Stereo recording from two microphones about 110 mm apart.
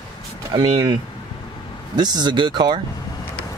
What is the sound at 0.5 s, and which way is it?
Speech, 45° right (ahead or behind).